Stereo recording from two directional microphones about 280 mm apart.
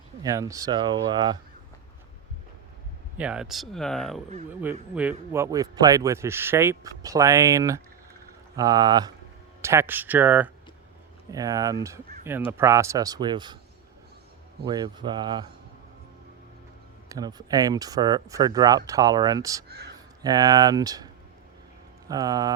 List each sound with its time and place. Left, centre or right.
0.2 s speech: centre
3.2 s speech: centre
14.6 s speech: centre
17.1 s speech: centre